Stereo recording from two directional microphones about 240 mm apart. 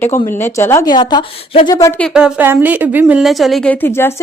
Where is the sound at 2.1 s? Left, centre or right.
Centre.